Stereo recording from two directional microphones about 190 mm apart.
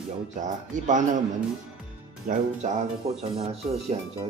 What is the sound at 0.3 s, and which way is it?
Speech, 40° right (ahead or behind).